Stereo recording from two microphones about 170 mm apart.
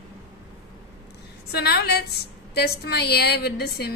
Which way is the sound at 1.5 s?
75° left (ahead or behind).